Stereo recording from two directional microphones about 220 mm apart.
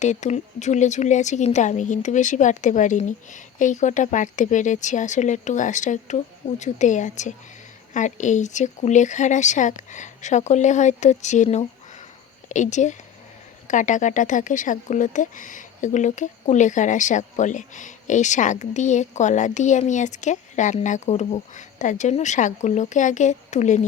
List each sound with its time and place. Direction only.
0.0 s speech: 30° left (ahead or behind)